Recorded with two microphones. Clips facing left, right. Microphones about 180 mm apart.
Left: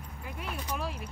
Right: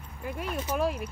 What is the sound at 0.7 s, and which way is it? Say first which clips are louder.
Speech: right 11 dB; 50° right (ahead or behind).